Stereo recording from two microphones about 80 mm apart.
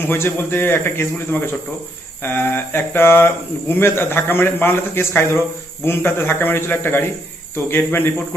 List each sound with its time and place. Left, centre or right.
0.1 s speech: left